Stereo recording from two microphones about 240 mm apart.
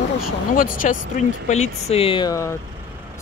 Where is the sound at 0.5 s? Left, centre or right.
Left.